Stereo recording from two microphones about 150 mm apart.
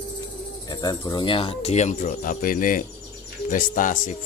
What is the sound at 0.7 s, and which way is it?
Speech, 25° left (ahead or behind).